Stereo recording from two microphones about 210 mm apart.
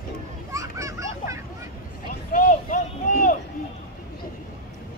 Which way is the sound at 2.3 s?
40° left (ahead or behind).